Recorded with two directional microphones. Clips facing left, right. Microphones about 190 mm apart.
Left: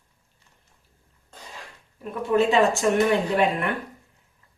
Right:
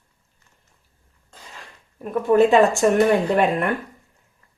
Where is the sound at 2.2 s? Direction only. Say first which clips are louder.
Right 5 dB; 50° right (ahead or behind).